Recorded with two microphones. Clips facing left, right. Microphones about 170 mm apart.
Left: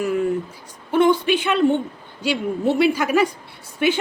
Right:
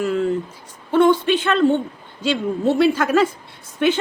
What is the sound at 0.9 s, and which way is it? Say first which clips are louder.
Speech: right 2 dB; 10° left (ahead or behind).